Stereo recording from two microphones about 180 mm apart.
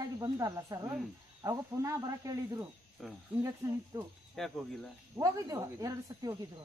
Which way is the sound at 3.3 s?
5° right (ahead or behind).